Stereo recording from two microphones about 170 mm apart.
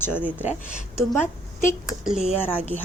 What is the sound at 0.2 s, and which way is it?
Speech, 5° right (ahead or behind).